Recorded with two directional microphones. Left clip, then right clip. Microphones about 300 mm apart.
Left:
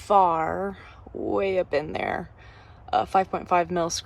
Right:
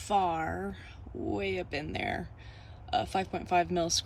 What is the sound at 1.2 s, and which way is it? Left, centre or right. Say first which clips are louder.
Speech: left 10 dB; centre.